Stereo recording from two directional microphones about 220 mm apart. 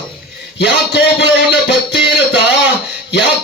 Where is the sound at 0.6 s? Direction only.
50° left (ahead or behind).